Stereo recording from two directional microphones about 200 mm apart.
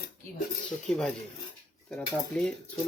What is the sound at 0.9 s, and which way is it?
Speech, 5° left (ahead or behind).